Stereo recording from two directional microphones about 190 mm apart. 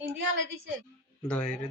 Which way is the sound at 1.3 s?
5° left (ahead or behind).